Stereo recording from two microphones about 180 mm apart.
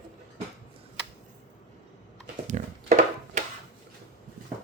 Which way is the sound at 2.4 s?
40° right (ahead or behind).